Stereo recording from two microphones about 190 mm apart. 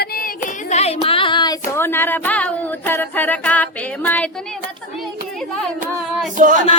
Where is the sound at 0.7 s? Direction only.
35° left (ahead or behind).